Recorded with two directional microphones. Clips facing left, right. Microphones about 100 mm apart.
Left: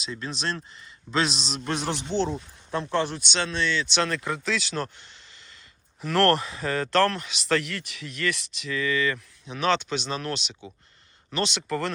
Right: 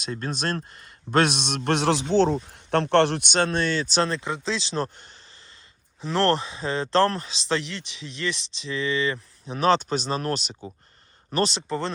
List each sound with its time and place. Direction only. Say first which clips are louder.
0.0 s a man's voice: right 3 dB; 50° right (ahead or behind); by 3.2 s 75° right (ahead or behind)
3.2 s speech: right 4 dB; 50° right (ahead or behind); by 4.9 s 30° right (ahead or behind)
6.0 s speech: left 1 dB; 20° right (ahead or behind)